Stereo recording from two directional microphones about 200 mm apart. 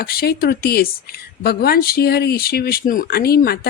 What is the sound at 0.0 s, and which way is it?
Speech, 50° left (ahead or behind).